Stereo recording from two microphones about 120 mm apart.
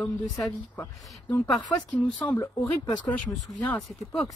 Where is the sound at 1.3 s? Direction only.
10° left (ahead or behind).